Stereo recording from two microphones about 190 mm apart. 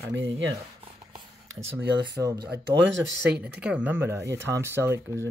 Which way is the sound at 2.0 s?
20° right (ahead or behind).